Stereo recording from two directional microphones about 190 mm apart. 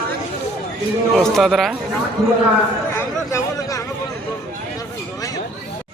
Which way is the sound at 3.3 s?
15° left (ahead or behind).